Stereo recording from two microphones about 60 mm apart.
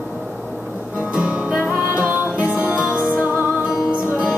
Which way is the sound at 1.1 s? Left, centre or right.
Right.